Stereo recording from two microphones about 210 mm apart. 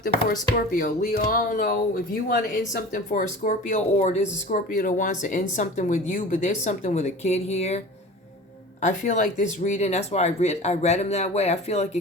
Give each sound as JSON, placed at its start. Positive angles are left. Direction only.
{"t": 0.0, "sound": "speech", "side_deg": 40}
{"t": 8.8, "sound": "speech", "side_deg": 35}